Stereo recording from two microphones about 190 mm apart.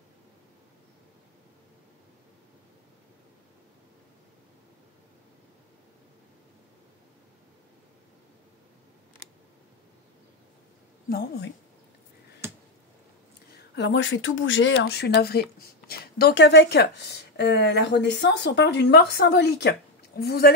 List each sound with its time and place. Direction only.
11.1 s speech: 55° left (ahead or behind)
13.7 s speech: 70° left (ahead or behind); by 20.5 s 55° left (ahead or behind)